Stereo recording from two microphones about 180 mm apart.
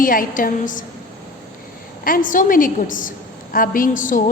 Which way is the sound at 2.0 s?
50° left (ahead or behind).